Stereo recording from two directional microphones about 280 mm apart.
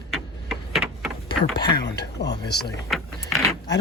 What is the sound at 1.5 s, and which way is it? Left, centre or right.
Speech, centre.